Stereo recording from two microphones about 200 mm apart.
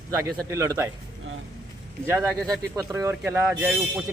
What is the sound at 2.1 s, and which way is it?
Speech, 10° right (ahead or behind).